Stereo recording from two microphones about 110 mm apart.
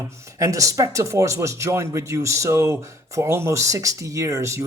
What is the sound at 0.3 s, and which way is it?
Speech, 30° right (ahead or behind).